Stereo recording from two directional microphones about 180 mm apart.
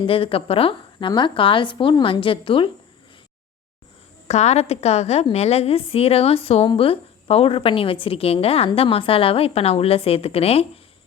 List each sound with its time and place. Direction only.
0.0 s a woman's voice: 30° left (ahead or behind)
4.3 s a woman's voice: 40° left (ahead or behind)